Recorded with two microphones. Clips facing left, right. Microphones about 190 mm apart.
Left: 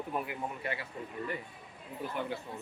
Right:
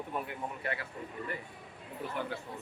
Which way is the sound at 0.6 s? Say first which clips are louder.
Even; 25° left (ahead or behind).